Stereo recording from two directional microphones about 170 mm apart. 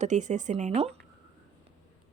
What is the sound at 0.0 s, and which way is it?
Speech, 45° right (ahead or behind).